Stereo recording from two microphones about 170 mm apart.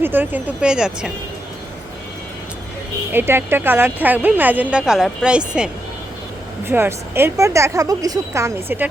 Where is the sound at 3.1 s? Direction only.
15° right (ahead or behind).